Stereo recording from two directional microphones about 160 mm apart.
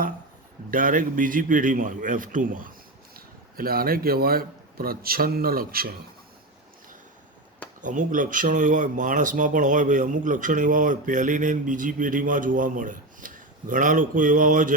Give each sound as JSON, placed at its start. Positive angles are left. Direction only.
{"t": 0.7, "sound": "speech", "side_deg": -60}
{"t": 3.2, "sound": "a man's voice", "side_deg": -70}
{"t": 7.8, "sound": "speech", "side_deg": -55}